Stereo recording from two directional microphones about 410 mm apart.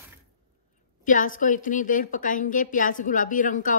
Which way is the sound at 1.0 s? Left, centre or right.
Centre.